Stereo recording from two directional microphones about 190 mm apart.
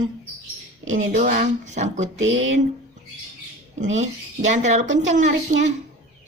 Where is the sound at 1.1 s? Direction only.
40° right (ahead or behind).